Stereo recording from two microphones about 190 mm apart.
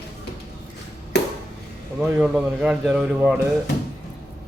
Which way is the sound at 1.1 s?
60° left (ahead or behind).